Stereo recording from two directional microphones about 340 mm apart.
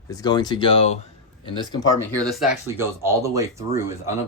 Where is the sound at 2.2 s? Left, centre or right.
Centre.